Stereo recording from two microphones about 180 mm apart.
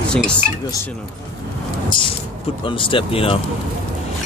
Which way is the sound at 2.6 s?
30° left (ahead or behind).